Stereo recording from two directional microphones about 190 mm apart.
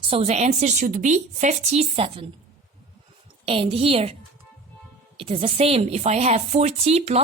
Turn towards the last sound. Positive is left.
turn(degrees=-35)  # may be behind; listen again after turning